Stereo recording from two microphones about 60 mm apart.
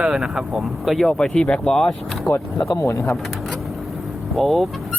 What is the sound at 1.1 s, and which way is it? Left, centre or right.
Speech, centre.